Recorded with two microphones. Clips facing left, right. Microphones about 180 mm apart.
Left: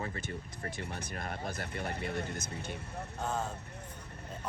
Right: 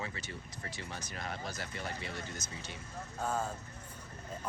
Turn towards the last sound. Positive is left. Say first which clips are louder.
# even
turn(degrees=-10)  # may be behind; listen again after turning